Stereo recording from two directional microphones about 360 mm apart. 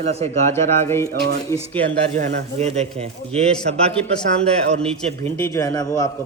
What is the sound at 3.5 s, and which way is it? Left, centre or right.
Speech, centre.